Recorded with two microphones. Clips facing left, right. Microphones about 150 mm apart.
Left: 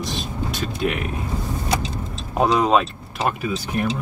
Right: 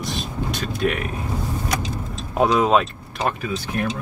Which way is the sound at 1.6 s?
25° left (ahead or behind).